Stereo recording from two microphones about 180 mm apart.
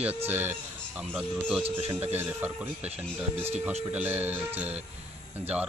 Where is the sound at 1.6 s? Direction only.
35° right (ahead or behind).